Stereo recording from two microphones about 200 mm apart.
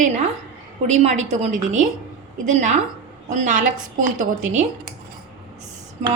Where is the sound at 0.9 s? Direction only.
35° right (ahead or behind).